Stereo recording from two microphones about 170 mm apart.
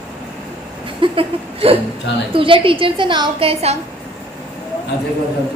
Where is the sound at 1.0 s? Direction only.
30° right (ahead or behind).